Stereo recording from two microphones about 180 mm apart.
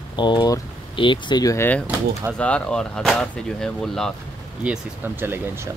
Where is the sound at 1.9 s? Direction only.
10° right (ahead or behind).